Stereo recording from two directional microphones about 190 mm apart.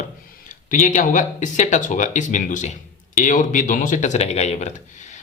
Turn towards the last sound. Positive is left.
turn(degrees=35)  # may be behind; listen again after turning